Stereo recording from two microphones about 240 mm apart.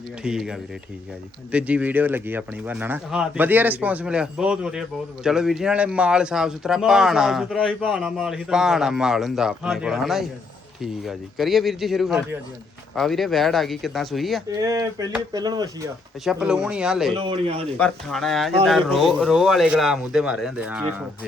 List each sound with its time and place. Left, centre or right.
0.2 s speech: centre
14.5 s speech: centre
16.2 s speech: centre
17.2 s a man's voice: right
17.7 s speech: centre